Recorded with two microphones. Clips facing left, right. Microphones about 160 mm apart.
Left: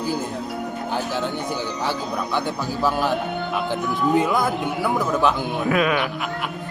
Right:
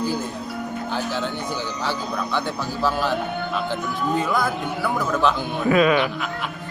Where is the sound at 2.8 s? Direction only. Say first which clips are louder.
Left 1 dB; 15° left (ahead or behind).